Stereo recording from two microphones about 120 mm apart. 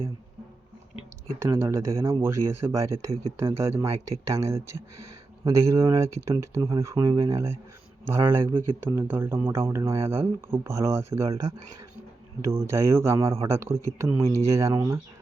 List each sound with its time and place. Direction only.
1.4 s speech: 20° right (ahead or behind)